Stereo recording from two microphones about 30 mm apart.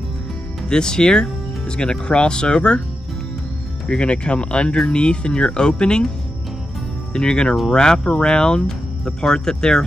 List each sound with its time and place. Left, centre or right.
0.7 s speech: left
3.8 s speech: left
7.2 s speech: left